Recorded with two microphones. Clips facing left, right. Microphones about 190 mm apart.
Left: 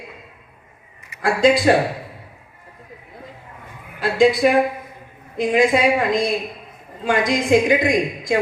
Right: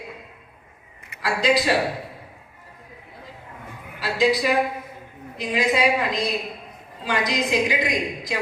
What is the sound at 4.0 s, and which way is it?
A man's voice, 50° left (ahead or behind).